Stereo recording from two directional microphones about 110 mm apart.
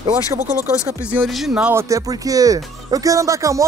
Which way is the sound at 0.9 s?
25° right (ahead or behind).